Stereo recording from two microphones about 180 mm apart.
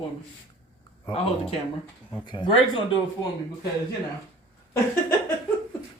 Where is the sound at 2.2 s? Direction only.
25° left (ahead or behind).